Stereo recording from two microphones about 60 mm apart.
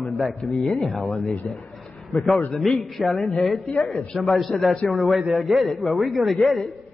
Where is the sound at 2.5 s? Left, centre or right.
Centre.